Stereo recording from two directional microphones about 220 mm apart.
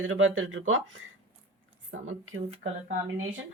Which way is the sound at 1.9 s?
65° right (ahead or behind).